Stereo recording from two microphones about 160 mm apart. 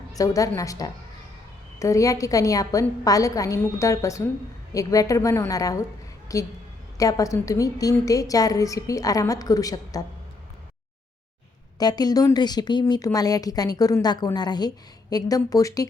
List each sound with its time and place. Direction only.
0.1 s a woman's voice: 20° left (ahead or behind)
11.8 s a woman's voice: 25° left (ahead or behind)